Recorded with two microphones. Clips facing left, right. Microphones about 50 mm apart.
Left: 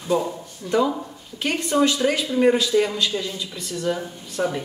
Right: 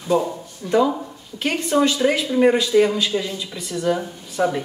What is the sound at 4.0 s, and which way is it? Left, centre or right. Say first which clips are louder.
Speech: right 2 dB; centre.